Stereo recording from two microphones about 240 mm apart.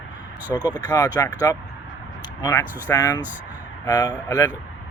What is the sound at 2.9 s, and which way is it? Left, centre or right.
Speech, centre.